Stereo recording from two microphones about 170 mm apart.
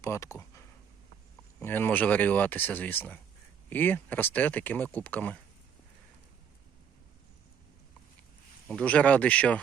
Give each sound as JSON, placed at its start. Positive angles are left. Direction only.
{"t": 0.0, "sound": "speech", "side_deg": 20}
{"t": 8.6, "sound": "speech", "side_deg": 5}